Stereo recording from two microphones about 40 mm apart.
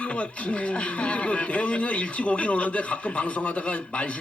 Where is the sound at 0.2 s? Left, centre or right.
Left.